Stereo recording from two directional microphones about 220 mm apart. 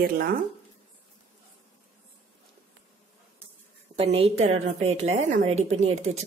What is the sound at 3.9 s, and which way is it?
A woman's voice, 25° right (ahead or behind).